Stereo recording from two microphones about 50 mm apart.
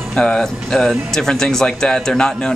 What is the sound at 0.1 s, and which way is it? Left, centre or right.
Speech, centre.